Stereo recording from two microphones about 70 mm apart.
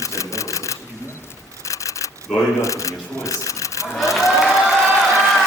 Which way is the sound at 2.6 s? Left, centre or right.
Left.